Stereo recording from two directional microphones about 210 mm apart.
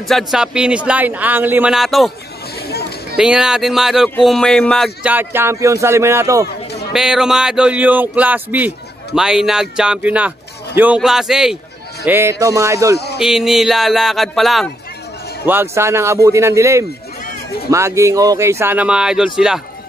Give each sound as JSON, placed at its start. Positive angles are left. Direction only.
{"t": 0.1, "sound": "speech", "side_deg": -5}
{"t": 3.2, "sound": "speech", "side_deg": -5}
{"t": 6.4, "sound": "chatter", "side_deg": 50}
{"t": 6.9, "sound": "speech", "side_deg": 0}
{"t": 13.2, "sound": "speech", "side_deg": 0}
{"t": 15.4, "sound": "speech", "side_deg": -10}